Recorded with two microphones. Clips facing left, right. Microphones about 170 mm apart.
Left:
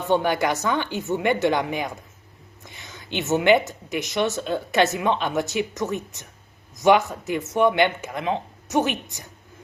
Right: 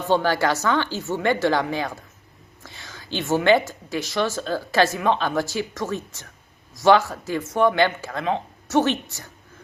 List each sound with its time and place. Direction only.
0.2 s a woman's voice: 20° left (ahead or behind)